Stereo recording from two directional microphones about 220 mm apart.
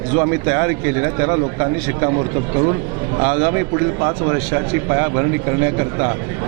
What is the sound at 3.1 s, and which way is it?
A man's voice, 25° right (ahead or behind).